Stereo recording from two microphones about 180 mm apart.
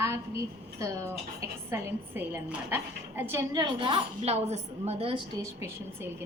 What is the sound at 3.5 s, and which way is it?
A woman's voice, 25° right (ahead or behind).